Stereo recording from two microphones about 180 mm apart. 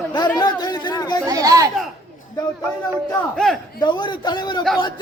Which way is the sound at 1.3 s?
20° right (ahead or behind).